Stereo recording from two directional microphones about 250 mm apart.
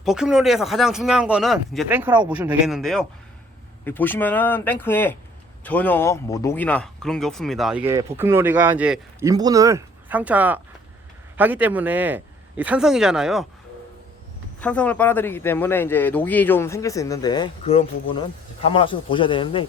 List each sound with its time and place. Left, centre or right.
0.0 s speech: centre
14.6 s speech: centre